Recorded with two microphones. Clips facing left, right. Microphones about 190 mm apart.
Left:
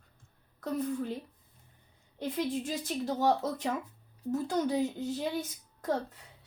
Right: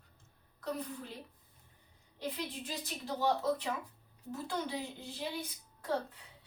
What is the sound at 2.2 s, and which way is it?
Speech, 45° left (ahead or behind).